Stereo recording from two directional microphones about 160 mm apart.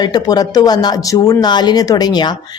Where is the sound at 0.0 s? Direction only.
25° left (ahead or behind).